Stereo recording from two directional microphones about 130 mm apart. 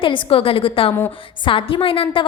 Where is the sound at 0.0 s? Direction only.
45° left (ahead or behind).